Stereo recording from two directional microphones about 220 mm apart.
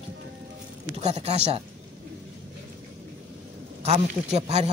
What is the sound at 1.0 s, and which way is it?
Speech, 30° right (ahead or behind).